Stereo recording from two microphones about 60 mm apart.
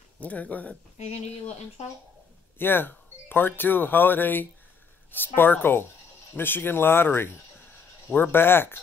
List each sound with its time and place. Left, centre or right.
0.2 s speech: left
2.6 s speech: left